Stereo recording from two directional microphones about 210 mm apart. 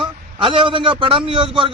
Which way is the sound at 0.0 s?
25° right (ahead or behind).